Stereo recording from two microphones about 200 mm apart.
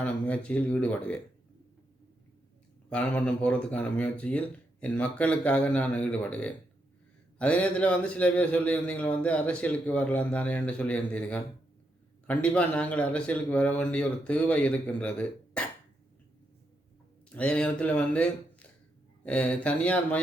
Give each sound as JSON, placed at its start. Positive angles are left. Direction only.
{"t": 0.0, "sound": "a man's voice", "side_deg": 5}
{"t": 2.9, "sound": "a man's voice", "side_deg": 5}
{"t": 17.2, "sound": "a man's voice", "side_deg": 5}